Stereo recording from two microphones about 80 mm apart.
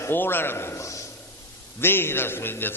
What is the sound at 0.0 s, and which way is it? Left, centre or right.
A man's voice, left.